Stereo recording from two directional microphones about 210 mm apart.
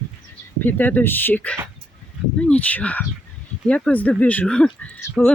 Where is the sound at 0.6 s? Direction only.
10° left (ahead or behind).